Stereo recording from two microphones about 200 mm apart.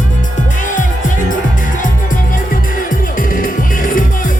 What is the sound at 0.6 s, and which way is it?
Music, 40° left (ahead or behind).